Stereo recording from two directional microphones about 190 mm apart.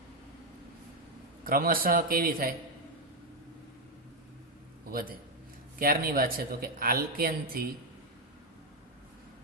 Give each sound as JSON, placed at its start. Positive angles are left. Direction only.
{"t": 1.5, "sound": "speech", "side_deg": -50}
{"t": 5.8, "sound": "speech", "side_deg": -50}